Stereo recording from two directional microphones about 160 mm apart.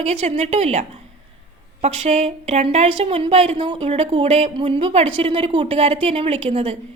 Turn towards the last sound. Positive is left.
turn(degrees=-40)  # may be behind; listen again after turning